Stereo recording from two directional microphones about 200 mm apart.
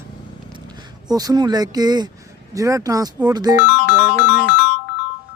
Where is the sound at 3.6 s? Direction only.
60° left (ahead or behind).